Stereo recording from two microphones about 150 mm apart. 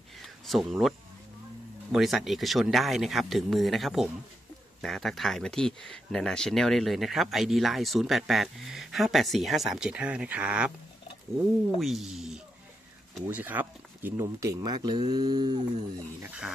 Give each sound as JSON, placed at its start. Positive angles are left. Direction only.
{"t": 0.5, "sound": "speech", "side_deg": 0}